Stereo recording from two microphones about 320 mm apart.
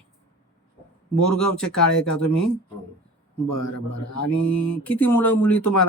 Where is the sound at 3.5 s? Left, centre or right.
Left.